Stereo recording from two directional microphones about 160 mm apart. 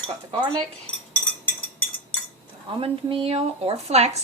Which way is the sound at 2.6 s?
35° right (ahead or behind).